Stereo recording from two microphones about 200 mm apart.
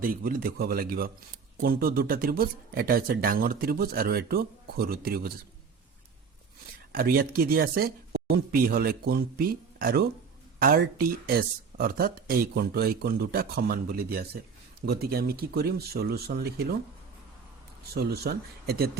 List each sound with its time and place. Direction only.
0.0 s speech: 45° right (ahead or behind)
6.9 s speech: 45° right (ahead or behind)
17.9 s speech: 50° right (ahead or behind)